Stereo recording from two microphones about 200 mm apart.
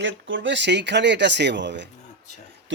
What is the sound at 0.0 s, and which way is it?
A man's voice, 70° right (ahead or behind).